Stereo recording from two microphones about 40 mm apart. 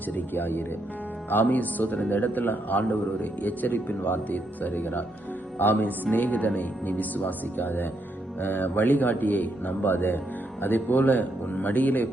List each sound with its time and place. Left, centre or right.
0.1 s a man's voice: left
6.2 s a man's voice: left